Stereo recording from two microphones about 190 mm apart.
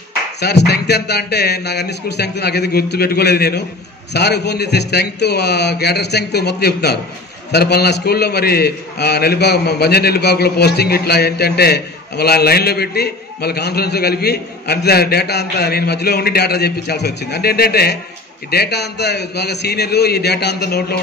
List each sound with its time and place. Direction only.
0.4 s a man's voice: 60° left (ahead or behind)